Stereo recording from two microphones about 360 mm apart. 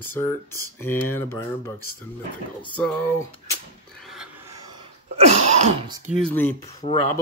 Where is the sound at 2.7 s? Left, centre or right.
Centre.